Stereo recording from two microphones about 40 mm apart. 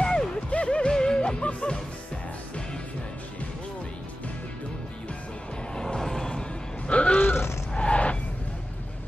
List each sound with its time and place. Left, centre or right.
0.0 s music: centre
5.8 s music: centre
6.9 s grunt: left
7.7 s a sound: left